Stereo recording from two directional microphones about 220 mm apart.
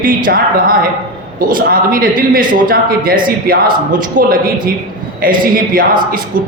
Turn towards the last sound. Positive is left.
turn(degrees=-40)  # may be behind; listen again after turning